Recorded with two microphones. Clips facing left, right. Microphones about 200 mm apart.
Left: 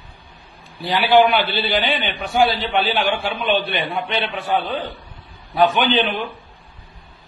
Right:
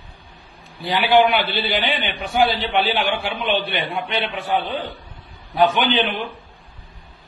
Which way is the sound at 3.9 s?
10° right (ahead or behind).